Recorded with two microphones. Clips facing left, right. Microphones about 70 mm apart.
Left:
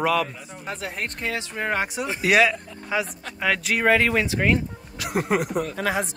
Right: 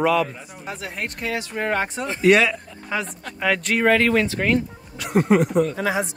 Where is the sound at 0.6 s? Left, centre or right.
Left.